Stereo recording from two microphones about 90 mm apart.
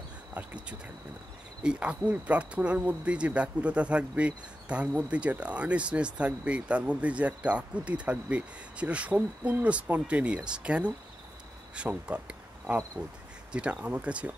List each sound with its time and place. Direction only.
1.6 s speech: 10° right (ahead or behind)